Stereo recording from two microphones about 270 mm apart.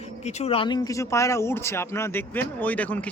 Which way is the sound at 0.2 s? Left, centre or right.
Left.